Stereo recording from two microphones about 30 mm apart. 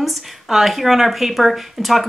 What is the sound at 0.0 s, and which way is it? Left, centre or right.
Speech, centre.